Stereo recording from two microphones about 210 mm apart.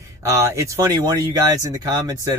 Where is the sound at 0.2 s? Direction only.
15° right (ahead or behind).